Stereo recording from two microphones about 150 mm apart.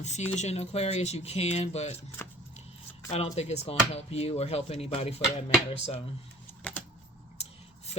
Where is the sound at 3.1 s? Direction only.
45° left (ahead or behind).